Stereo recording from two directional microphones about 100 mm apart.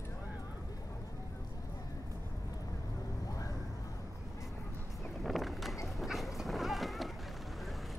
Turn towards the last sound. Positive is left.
turn(degrees=0)  # may be behind; listen again after turning